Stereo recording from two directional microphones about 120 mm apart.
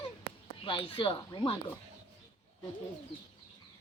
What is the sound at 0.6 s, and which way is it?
Speech, 45° left (ahead or behind).